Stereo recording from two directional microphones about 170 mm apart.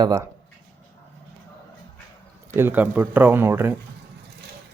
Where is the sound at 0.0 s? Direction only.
20° right (ahead or behind).